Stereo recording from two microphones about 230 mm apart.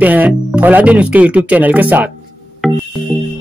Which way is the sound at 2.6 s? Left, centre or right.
Centre.